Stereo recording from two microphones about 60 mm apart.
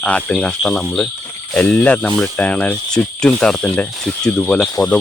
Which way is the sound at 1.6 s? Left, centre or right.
Left.